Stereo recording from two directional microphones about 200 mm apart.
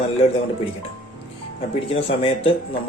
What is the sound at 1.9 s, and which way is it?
Speech, 30° left (ahead or behind).